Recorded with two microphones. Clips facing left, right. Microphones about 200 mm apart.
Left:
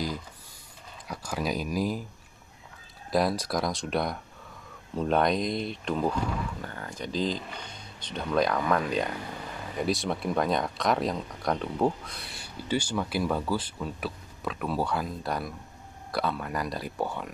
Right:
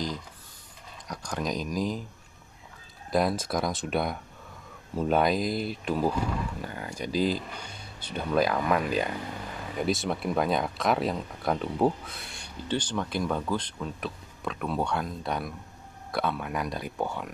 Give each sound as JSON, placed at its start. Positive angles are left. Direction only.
{"t": 1.0, "sound": "speech", "side_deg": 5}
{"t": 3.1, "sound": "speech", "side_deg": 0}